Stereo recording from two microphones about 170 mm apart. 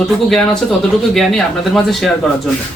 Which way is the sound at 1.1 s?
Centre (ahead or behind).